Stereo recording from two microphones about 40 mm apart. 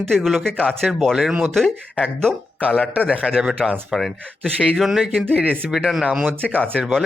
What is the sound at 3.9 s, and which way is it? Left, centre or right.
Speech, centre.